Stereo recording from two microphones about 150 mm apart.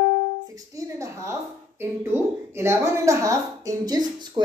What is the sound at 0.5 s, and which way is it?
A woman's voice, 25° right (ahead or behind).